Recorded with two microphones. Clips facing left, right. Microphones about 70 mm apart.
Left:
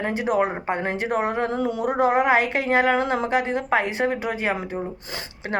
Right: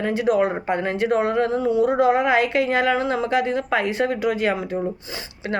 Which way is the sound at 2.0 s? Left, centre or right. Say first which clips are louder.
Right 1 dB; left.